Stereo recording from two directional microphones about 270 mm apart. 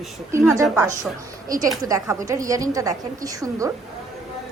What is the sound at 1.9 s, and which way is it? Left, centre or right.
A woman's voice, centre.